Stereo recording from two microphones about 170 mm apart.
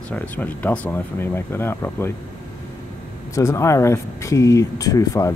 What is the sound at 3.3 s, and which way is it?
Speech, 20° left (ahead or behind).